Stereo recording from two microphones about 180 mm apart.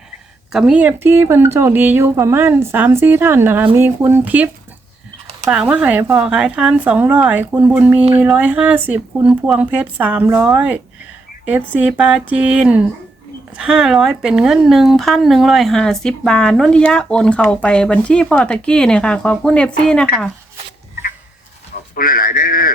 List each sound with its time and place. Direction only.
0.5 s speech: 5° right (ahead or behind)
5.5 s speech: 5° right (ahead or behind)
21.9 s speech: 50° left (ahead or behind)